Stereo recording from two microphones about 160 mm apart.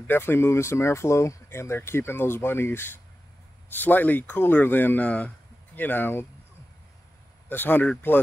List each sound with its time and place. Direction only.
0.0 s speech: 15° left (ahead or behind)
7.4 s speech: 10° left (ahead or behind)